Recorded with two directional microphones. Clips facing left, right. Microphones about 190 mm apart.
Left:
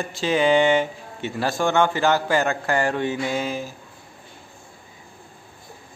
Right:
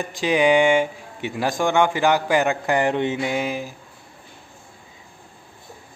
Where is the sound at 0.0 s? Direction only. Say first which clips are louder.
Right 2 dB; 15° right (ahead or behind).